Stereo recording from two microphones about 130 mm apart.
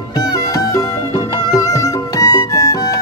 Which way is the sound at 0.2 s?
25° left (ahead or behind).